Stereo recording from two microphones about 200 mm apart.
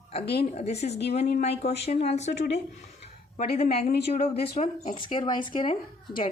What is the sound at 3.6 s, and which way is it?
Speech, 30° left (ahead or behind).